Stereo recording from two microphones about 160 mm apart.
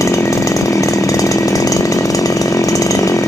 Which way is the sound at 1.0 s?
20° left (ahead or behind).